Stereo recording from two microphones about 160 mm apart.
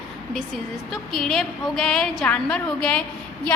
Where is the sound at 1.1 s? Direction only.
Centre (ahead or behind).